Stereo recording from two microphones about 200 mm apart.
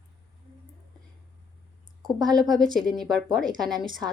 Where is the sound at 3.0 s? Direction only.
Centre (ahead or behind).